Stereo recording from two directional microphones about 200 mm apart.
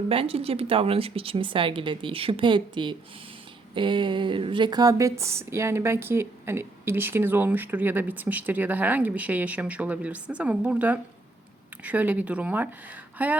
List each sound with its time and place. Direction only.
0.1 s speech: 30° right (ahead or behind); by 13.3 s 10° right (ahead or behind)